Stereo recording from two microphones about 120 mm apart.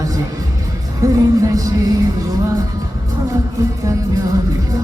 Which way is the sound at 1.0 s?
30° right (ahead or behind).